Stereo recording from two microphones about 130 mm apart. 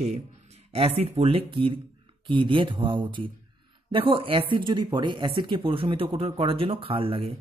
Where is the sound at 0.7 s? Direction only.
50° right (ahead or behind).